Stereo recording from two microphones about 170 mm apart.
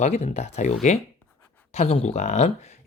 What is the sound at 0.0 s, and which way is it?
Speech, 40° left (ahead or behind).